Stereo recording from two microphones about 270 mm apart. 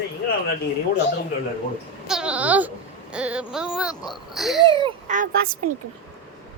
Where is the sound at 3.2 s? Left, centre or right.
Centre.